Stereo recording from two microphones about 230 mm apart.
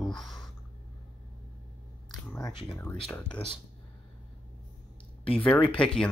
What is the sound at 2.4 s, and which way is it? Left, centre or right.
Speech, centre.